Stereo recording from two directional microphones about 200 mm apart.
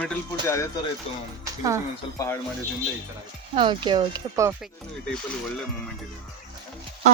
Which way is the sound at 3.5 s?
25° right (ahead or behind).